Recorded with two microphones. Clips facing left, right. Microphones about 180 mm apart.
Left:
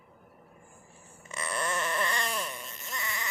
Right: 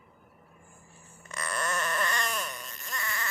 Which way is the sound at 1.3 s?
25° left (ahead or behind).